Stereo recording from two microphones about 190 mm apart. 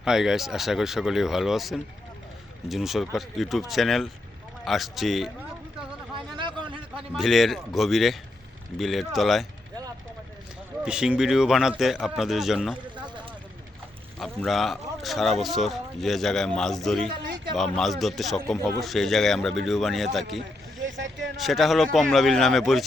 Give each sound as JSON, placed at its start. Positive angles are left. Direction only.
{"t": 0.0, "sound": "speech", "side_deg": -5}
{"t": 6.1, "sound": "a sound", "side_deg": -25}
{"t": 6.9, "sound": "speech", "side_deg": 0}
{"t": 10.8, "sound": "speech", "side_deg": -5}
{"t": 14.2, "sound": "speech", "side_deg": 0}
{"t": 20.8, "sound": "vehicle", "side_deg": -75}
{"t": 21.3, "sound": "speech", "side_deg": 0}